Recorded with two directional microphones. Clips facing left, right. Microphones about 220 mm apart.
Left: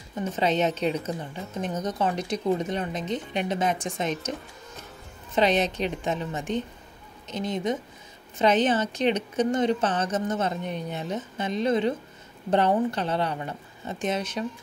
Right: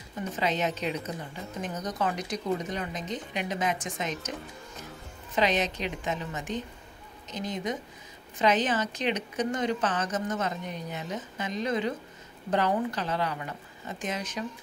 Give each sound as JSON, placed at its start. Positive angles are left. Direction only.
{"t": 0.2, "sound": "speech", "side_deg": 30}
{"t": 5.3, "sound": "speech", "side_deg": 30}